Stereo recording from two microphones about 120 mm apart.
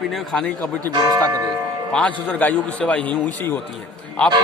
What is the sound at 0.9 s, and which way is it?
Speech, 30° right (ahead or behind).